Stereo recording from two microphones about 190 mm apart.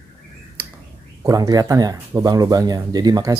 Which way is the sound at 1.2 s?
20° right (ahead or behind).